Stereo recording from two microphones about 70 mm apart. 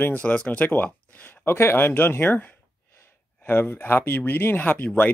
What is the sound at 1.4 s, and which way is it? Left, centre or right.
Speech, left.